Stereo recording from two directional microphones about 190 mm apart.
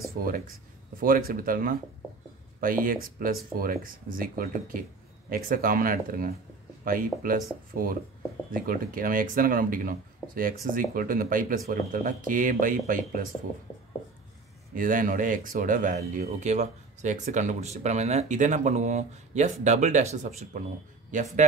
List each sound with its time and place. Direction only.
0.2 s speech: 50° right (ahead or behind)
14.8 s speech: 45° right (ahead or behind)